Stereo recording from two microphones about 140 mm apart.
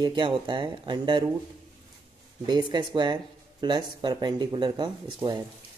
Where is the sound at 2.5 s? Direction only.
30° right (ahead or behind).